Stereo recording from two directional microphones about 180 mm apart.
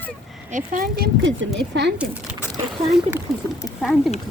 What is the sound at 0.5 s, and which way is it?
Speech, 45° right (ahead or behind).